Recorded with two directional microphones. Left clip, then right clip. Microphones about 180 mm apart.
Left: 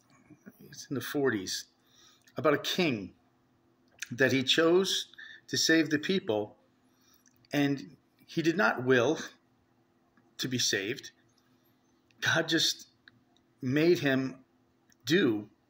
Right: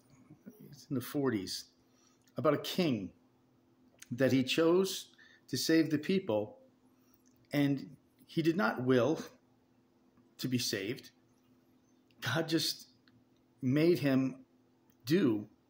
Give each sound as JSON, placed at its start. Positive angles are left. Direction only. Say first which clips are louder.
{"t": 0.7, "sound": "speech", "louder": "left 4 dB", "side_deg": -20}
{"t": 4.0, "sound": "speech", "louder": "left 4 dB", "side_deg": -15}
{"t": 7.5, "sound": "speech", "louder": "left 3 dB", "side_deg": -15}
{"t": 10.3, "sound": "speech", "louder": "left 6 dB", "side_deg": -20}
{"t": 12.2, "sound": "speech", "louder": "left 6 dB", "side_deg": -15}